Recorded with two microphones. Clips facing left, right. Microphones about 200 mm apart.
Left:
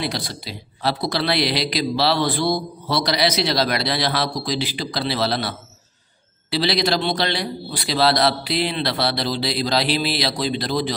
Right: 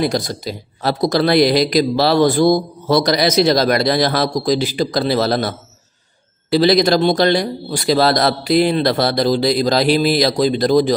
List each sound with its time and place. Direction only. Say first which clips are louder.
0.0 s speech: right 8 dB; 45° right (ahead or behind)